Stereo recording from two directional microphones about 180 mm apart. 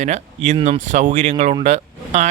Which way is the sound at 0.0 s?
40° right (ahead or behind).